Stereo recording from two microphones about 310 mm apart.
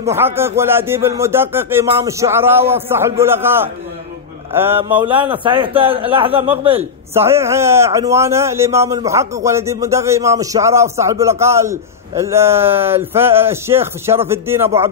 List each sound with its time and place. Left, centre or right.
0.0 s a man's voice: centre
4.5 s mantra: centre
5.1 s a man's voice: centre